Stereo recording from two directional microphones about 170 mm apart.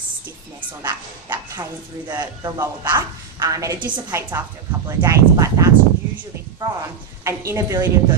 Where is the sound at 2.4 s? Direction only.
15° right (ahead or behind).